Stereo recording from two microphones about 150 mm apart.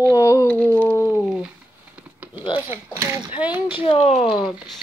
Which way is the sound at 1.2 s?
5° right (ahead or behind).